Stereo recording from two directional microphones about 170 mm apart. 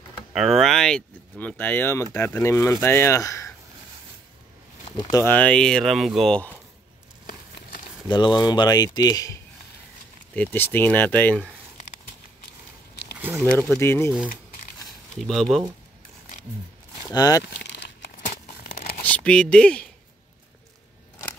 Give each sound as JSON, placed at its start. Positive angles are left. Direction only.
{"t": 0.3, "sound": "speech", "side_deg": 0}
{"t": 4.9, "sound": "speech", "side_deg": 20}
{"t": 5.3, "sound": "speech", "side_deg": 5}
{"t": 8.1, "sound": "speech", "side_deg": 25}
{"t": 10.3, "sound": "speech", "side_deg": 10}
{"t": 13.2, "sound": "speech", "side_deg": -15}
{"t": 13.7, "sound": "speech", "side_deg": 15}
{"t": 15.1, "sound": "speech", "side_deg": 0}
{"t": 17.1, "sound": "speech", "side_deg": 20}
{"t": 17.6, "sound": "crumpling", "side_deg": 85}
{"t": 19.0, "sound": "speech", "side_deg": 5}